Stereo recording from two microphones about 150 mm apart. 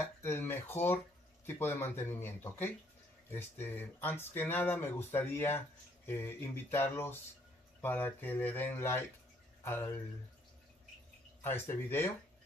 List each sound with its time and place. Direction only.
0.0 s speech: 15° left (ahead or behind)
11.4 s speech: 15° left (ahead or behind)